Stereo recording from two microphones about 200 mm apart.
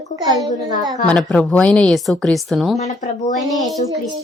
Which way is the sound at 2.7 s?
35° left (ahead or behind).